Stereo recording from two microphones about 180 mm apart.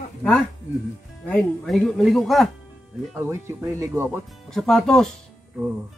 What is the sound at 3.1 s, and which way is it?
Speech, 15° right (ahead or behind).